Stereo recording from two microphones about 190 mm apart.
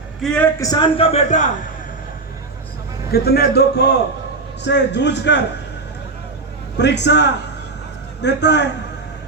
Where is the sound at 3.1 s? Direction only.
55° left (ahead or behind).